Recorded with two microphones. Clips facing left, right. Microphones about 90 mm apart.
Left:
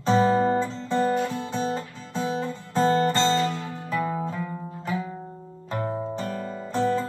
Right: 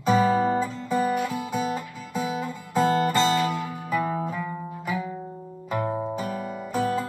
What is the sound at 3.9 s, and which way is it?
Music, 10° right (ahead or behind).